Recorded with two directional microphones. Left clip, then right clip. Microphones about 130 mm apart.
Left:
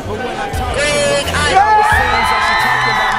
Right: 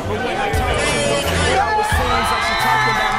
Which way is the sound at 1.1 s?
15° left (ahead or behind).